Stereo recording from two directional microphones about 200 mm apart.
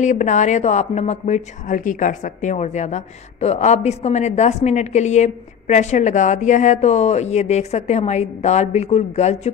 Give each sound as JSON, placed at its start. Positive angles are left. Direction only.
{"t": 0.0, "sound": "speech", "side_deg": 40}